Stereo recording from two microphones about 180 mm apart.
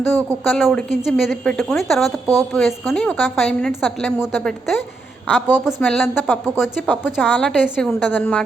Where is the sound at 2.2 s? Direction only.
20° right (ahead or behind).